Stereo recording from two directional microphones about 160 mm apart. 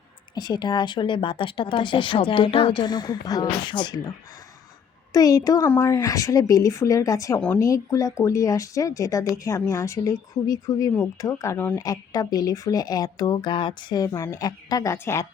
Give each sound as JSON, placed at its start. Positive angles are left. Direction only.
{"t": 0.3, "sound": "speech", "side_deg": 25}
{"t": 5.1, "sound": "speech", "side_deg": 25}
{"t": 11.8, "sound": "speech", "side_deg": 25}